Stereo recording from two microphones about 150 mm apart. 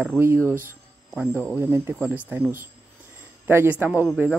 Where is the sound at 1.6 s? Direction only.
15° right (ahead or behind).